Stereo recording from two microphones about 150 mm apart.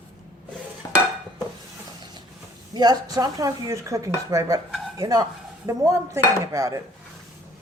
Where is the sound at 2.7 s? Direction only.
25° right (ahead or behind).